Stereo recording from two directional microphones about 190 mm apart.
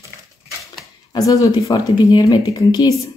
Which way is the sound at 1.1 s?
20° left (ahead or behind).